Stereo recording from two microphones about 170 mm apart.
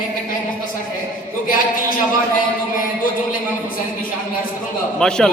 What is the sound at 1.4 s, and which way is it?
Speech, 55° left (ahead or behind).